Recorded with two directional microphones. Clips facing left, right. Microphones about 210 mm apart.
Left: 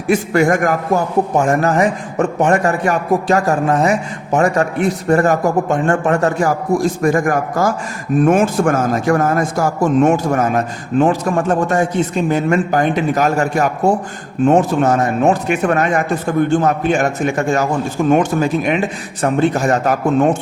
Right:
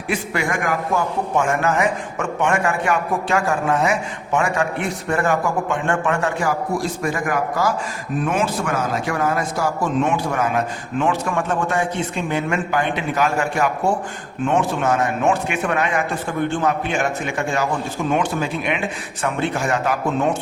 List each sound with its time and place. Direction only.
0.1 s a man's voice: 45° left (ahead or behind)